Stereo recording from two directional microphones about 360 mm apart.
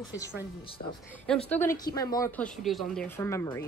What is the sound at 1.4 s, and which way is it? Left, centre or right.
Speech, centre.